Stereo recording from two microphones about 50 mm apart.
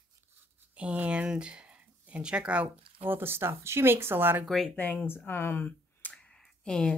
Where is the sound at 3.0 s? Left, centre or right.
Right.